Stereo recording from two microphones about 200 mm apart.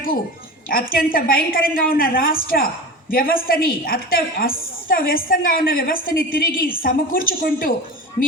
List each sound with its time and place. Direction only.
0.7 s a woman's voice: 45° left (ahead or behind)